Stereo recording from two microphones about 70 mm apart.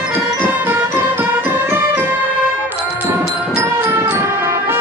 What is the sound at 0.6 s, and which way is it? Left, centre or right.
Music, right.